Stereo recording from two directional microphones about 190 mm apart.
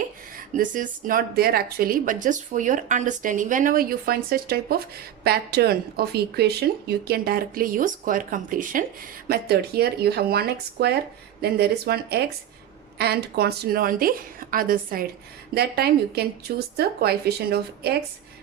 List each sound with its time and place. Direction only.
0.3 s speech: 45° right (ahead or behind)
9.2 s speech: 55° right (ahead or behind)